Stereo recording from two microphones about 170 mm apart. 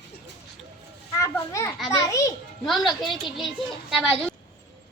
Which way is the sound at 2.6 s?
Centre (ahead or behind).